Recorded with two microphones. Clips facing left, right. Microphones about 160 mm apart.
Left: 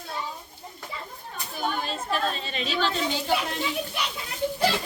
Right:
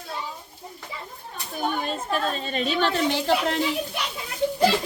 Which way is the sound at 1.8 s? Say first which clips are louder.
Right 2 dB; 50° right (ahead or behind).